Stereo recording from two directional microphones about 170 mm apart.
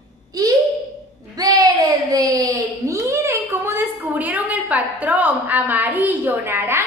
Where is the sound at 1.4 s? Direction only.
20° right (ahead or behind).